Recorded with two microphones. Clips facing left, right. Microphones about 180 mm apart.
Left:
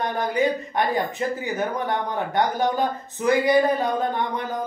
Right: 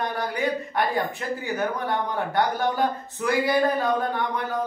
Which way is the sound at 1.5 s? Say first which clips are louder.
Left 1 dB; 20° left (ahead or behind).